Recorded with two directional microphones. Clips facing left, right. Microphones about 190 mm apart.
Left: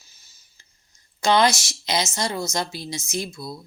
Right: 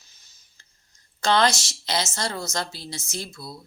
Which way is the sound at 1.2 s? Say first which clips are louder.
Left 2 dB; 10° left (ahead or behind).